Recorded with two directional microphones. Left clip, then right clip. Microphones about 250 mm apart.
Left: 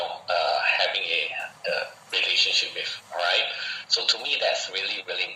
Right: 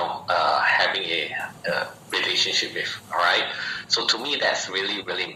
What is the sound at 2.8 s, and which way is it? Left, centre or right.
A man's voice, centre.